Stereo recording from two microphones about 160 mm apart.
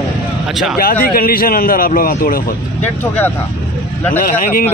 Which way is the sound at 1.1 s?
65° left (ahead or behind).